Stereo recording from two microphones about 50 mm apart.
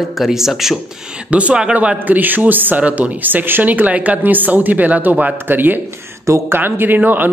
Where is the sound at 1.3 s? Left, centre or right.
Right.